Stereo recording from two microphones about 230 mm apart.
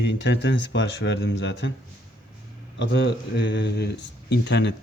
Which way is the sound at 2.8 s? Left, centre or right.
Left.